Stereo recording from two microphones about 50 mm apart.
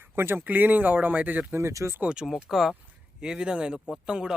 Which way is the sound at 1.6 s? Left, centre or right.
Right.